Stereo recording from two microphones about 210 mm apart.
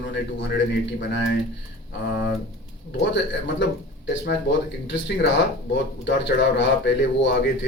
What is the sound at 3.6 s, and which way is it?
A man's voice, 55° left (ahead or behind).